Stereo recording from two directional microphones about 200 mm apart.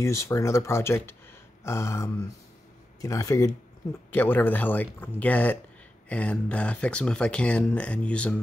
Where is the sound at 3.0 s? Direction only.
15° left (ahead or behind).